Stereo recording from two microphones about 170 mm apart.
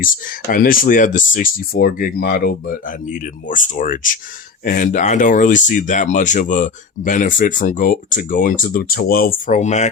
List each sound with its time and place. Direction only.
0.0 s speech: 55° left (ahead or behind)